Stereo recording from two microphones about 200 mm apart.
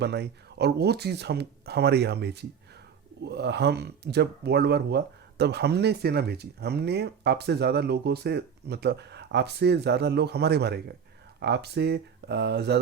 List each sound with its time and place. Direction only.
0.0 s speech: 55° right (ahead or behind)